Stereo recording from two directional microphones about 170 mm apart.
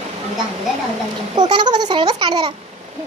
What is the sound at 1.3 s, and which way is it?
A child's voice, 25° right (ahead or behind).